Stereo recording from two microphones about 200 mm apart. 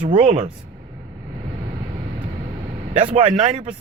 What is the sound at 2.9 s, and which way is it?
Speech, 30° right (ahead or behind).